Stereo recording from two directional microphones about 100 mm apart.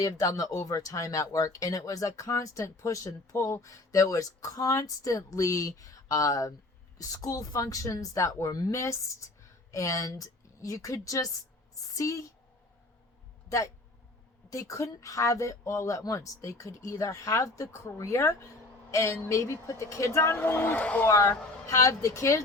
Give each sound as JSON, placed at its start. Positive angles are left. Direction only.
{"t": 0.0, "sound": "a woman's voice", "side_deg": 35}
{"t": 14.5, "sound": "speech", "side_deg": 35}
{"t": 21.1, "sound": "speech", "side_deg": 30}